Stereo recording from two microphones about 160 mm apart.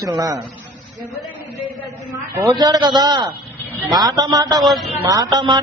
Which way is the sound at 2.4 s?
25° right (ahead or behind).